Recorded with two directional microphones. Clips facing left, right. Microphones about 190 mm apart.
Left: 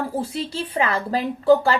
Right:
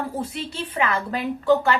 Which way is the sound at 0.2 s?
35° left (ahead or behind).